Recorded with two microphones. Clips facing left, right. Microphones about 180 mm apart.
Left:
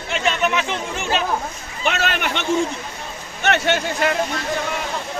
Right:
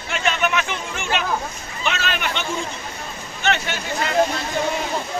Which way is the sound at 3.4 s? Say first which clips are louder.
Left 4 dB; 70° left (ahead or behind).